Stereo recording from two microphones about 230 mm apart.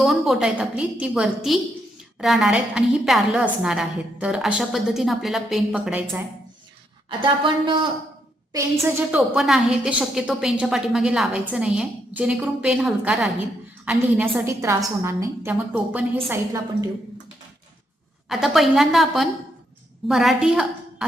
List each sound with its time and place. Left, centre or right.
0.0 s a woman's voice: centre
7.2 s a woman's voice: right
8.8 s a woman's voice: centre
18.3 s a woman's voice: centre